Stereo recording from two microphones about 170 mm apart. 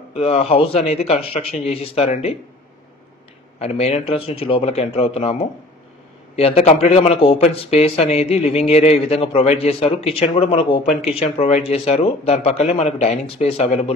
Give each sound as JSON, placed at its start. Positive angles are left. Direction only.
{"t": 0.2, "sound": "speech", "side_deg": 35}
{"t": 3.5, "sound": "speech", "side_deg": 35}